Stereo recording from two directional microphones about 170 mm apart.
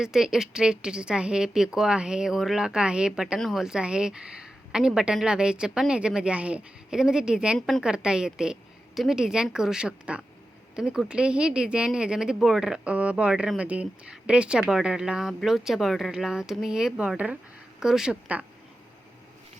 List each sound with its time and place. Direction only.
0.0 s speech: 5° right (ahead or behind)